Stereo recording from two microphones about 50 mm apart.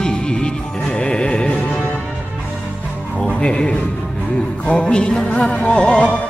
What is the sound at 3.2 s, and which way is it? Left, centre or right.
Speech, centre.